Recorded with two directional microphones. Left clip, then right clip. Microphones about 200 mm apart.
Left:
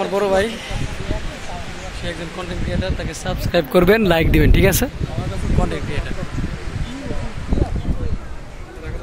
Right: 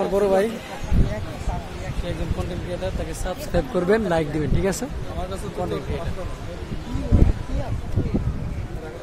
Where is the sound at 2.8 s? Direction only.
15° left (ahead or behind).